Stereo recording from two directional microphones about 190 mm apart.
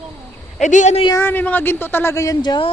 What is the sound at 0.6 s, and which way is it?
Speech, 40° left (ahead or behind).